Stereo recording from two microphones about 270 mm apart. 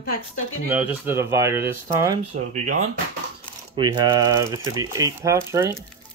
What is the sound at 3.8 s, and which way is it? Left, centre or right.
Speech, centre.